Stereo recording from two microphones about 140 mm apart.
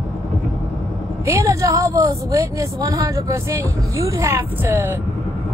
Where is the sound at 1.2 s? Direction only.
20° right (ahead or behind).